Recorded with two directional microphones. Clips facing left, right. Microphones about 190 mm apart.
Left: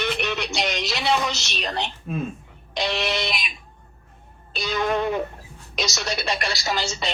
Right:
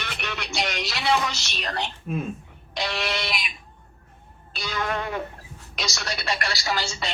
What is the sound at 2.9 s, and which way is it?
Speech, 20° left (ahead or behind).